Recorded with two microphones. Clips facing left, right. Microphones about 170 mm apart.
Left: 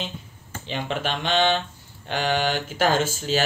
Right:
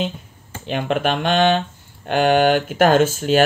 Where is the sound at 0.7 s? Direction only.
55° right (ahead or behind).